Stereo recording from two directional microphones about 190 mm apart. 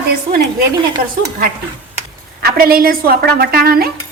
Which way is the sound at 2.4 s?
50° right (ahead or behind).